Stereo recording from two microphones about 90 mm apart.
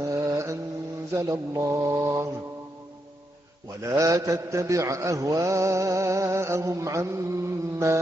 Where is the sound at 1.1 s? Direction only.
35° right (ahead or behind).